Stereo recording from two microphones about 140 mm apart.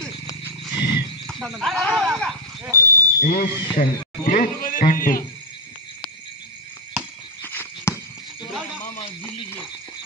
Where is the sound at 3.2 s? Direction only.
85° left.